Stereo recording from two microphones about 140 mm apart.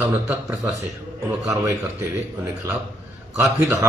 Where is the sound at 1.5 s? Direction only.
20° right (ahead or behind).